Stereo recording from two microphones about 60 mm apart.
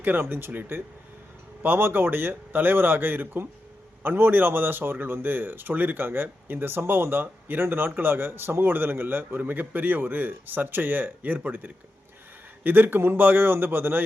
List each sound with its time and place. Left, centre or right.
0.0 s a man's voice: right